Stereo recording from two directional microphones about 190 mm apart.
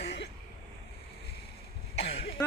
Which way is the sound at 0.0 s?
65° left (ahead or behind).